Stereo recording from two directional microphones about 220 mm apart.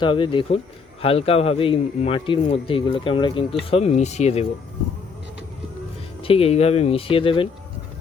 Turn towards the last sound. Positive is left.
turn(degrees=25)  # may be behind; listen again after turning